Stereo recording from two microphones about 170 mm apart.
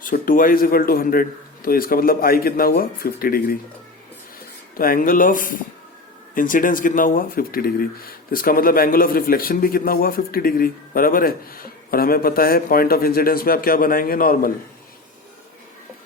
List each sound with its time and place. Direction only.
0.0 s speech: 55° left (ahead or behind)
4.8 s speech: 55° left (ahead or behind)